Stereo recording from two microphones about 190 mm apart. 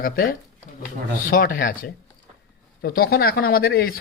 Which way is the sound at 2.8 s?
50° left (ahead or behind).